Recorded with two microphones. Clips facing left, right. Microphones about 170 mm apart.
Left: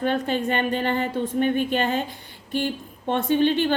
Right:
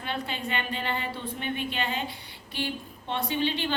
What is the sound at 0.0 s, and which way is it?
A woman's voice, 45° left (ahead or behind).